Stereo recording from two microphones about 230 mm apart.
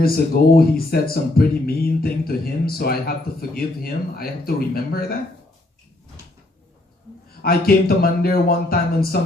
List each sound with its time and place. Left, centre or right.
0.5 s speech: left
7.4 s speech: left